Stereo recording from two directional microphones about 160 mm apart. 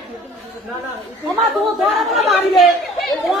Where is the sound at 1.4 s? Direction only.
Centre (ahead or behind).